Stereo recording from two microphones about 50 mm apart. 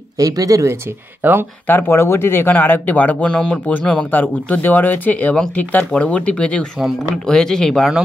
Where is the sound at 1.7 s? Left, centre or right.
Left.